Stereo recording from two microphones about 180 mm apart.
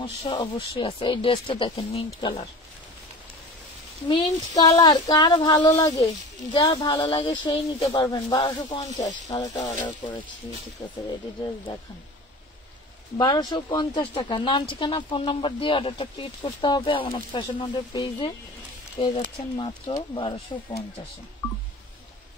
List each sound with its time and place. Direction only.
0.0 s speech: 30° left (ahead or behind)
4.1 s speech: 25° left (ahead or behind)
13.2 s speech: 25° left (ahead or behind)